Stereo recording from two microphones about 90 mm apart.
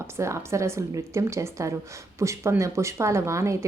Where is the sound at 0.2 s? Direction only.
30° right (ahead or behind).